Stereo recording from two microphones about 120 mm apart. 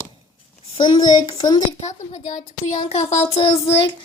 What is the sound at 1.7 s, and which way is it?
A woman's voice, 70° left (ahead or behind).